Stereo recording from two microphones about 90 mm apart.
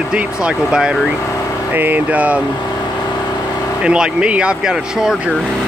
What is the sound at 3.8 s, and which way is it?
Speech, 10° right (ahead or behind).